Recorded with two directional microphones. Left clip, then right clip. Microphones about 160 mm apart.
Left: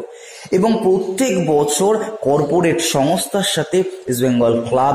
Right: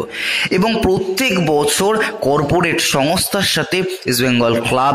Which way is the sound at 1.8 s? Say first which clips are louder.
Right 1 dB; 15° right (ahead or behind).